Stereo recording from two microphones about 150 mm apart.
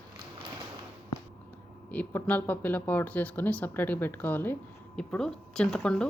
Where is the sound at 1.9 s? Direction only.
10° left (ahead or behind).